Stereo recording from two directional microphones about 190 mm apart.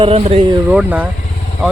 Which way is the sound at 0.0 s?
30° right (ahead or behind).